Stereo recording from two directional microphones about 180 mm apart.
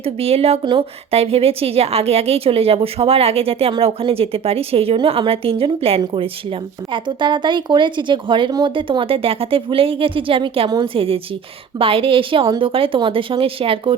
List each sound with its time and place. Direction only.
0.0 s a woman's voice: 35° right (ahead or behind)